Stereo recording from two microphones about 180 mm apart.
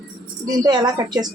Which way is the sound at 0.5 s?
25° right (ahead or behind).